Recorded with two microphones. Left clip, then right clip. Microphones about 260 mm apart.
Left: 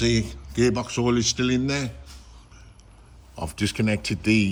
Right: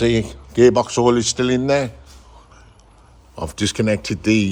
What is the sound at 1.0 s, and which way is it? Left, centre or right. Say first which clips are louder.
Speech: right 8 dB; right.